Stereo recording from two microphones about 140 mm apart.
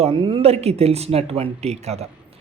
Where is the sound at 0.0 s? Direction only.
40° right (ahead or behind).